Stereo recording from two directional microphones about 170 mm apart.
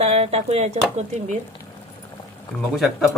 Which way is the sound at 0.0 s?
40° right (ahead or behind).